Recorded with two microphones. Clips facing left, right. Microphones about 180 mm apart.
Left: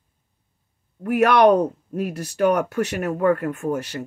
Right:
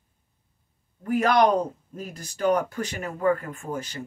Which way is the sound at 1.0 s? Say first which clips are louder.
Left 5 dB; 70° left (ahead or behind).